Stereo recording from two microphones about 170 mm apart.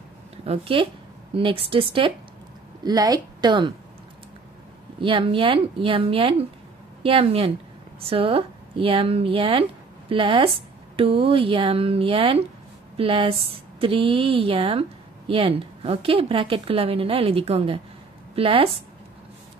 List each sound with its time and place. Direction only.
0.5 s a woman's voice: 30° right (ahead or behind)
5.0 s a woman's voice: 30° right (ahead or behind)